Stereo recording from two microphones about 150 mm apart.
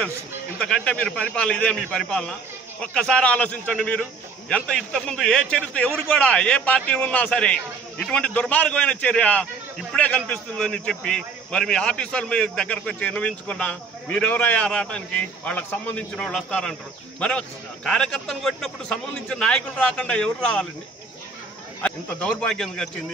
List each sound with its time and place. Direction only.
0.6 s a man's voice: 5° left (ahead or behind)
21.8 s a man's voice: 5° left (ahead or behind)